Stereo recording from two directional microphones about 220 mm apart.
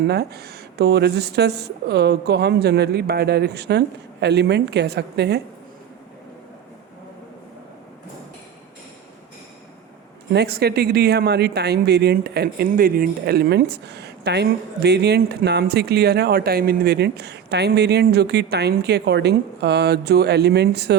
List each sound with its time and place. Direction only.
0.1 s speech: 45° right (ahead or behind)
10.3 s speech: 45° right (ahead or behind)